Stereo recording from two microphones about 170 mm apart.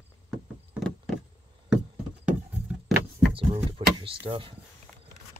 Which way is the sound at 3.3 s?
30° right (ahead or behind).